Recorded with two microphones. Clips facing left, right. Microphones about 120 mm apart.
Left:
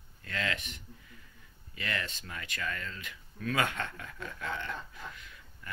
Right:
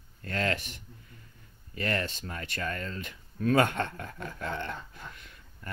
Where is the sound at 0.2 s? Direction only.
45° right (ahead or behind).